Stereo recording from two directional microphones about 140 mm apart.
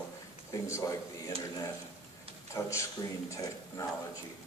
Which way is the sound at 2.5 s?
20° left (ahead or behind).